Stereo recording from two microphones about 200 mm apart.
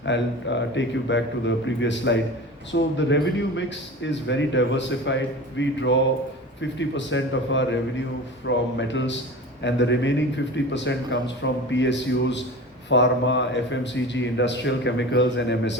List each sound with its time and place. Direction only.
0.0 s a man's voice: 65° left (ahead or behind)